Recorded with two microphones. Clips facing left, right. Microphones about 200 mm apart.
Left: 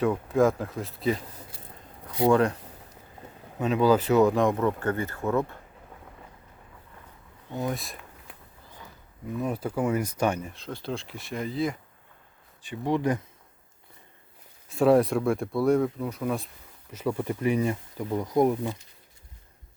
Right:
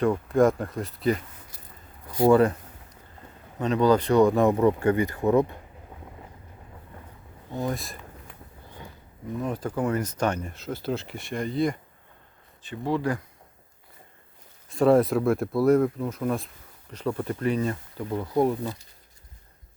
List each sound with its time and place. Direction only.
0.0 s speech: centre (ahead or behind)
2.0 s a sound: 5° right (ahead or behind)
3.6 s speech: 5° left (ahead or behind); by 5.5 s 15° right (ahead or behind)
7.5 s a sound: centre (ahead or behind)
9.4 s speech: 10° left (ahead or behind)
10.5 s speech: 5° right (ahead or behind)
12.6 s speech: 15° left (ahead or behind)
14.7 s speech: centre (ahead or behind)